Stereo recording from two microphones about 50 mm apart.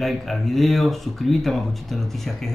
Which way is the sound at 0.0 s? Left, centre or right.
Centre.